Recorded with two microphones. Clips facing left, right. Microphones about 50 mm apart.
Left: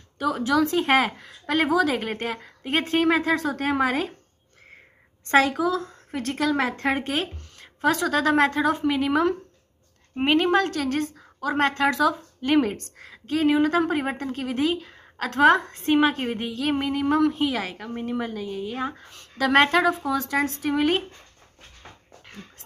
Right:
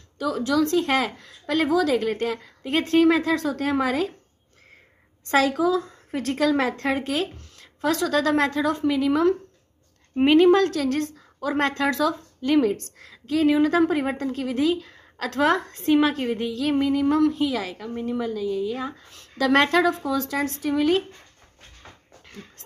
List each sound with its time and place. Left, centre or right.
0.2 s a woman's voice: left
5.3 s a woman's voice: centre
6.9 s a woman's voice: left
7.2 s a woman's voice: centre
12.4 s a woman's voice: left
13.0 s a woman's voice: centre
16.2 s a woman's voice: centre
17.9 s a woman's voice: left
19.0 s a woman's voice: centre
20.6 s a woman's voice: left